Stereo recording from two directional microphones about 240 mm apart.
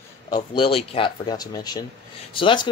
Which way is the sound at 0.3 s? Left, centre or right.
Left.